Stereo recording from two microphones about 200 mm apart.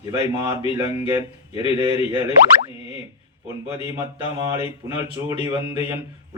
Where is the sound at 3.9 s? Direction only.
15° right (ahead or behind).